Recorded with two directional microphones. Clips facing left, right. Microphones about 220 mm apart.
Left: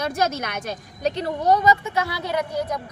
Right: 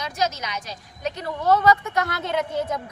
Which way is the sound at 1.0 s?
30° left (ahead or behind).